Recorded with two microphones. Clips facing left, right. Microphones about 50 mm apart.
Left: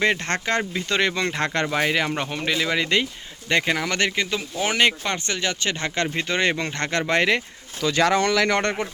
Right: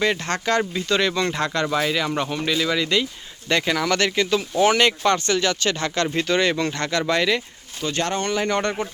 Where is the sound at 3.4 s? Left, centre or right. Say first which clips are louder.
Right 1 dB; left.